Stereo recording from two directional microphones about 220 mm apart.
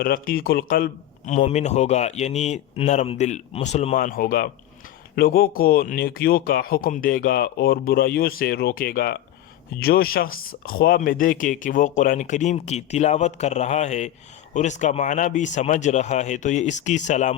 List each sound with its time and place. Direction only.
0.0 s speech: 40° left (ahead or behind)